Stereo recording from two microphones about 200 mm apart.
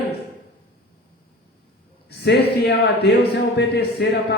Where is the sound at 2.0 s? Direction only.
55° left (ahead or behind).